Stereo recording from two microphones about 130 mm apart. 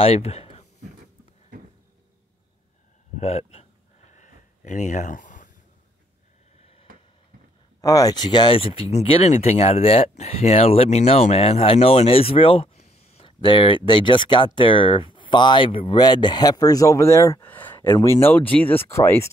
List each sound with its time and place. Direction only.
0.0 s speech: 50° left (ahead or behind)
3.2 s speech: 55° left (ahead or behind)
4.1 s a sound: 70° left (ahead or behind); by 5.5 s 85° left
6.6 s a sound: 50° left (ahead or behind)
7.8 s speech: 25° left (ahead or behind); by 13.3 s 55° left (ahead or behind)
13.4 s speech: 40° left (ahead or behind); by 19.2 s 20° left (ahead or behind)